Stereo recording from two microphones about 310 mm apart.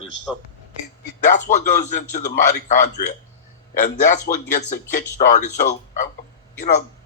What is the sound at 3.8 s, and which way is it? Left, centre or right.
Speech, left.